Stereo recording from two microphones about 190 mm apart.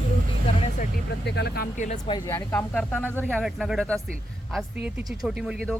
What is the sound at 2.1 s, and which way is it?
Speech, 15° left (ahead or behind).